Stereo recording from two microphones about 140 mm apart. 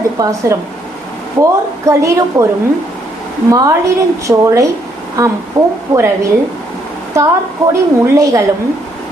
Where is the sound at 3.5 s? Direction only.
25° right (ahead or behind).